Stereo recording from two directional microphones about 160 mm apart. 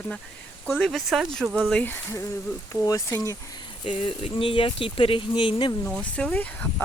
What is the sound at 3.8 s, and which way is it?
Speech, 35° left (ahead or behind).